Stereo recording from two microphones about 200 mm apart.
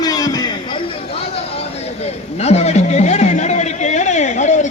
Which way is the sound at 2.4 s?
30° left (ahead or behind).